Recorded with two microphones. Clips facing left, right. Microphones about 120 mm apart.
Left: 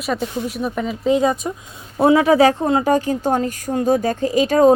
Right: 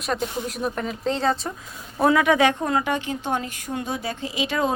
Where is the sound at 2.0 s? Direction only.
30° left (ahead or behind).